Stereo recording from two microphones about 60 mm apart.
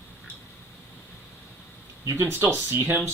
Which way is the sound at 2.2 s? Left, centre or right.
Right.